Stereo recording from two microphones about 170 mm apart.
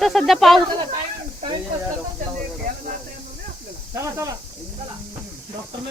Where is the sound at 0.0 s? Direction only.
Centre (ahead or behind).